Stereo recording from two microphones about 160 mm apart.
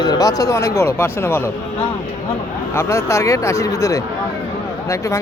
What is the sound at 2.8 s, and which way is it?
Speech, 15° left (ahead or behind).